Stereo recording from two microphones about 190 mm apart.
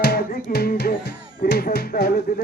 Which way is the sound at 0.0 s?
55° left (ahead or behind).